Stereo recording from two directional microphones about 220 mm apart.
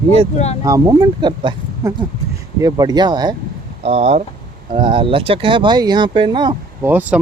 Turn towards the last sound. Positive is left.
turn(degrees=-5)  # may be behind; listen again after turning